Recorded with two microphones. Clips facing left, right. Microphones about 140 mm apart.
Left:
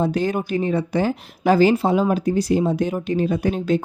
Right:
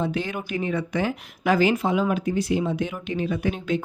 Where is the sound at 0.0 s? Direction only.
40° left (ahead or behind).